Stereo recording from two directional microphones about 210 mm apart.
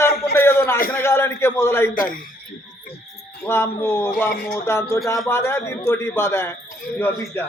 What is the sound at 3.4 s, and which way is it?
Speech, 10° left (ahead or behind).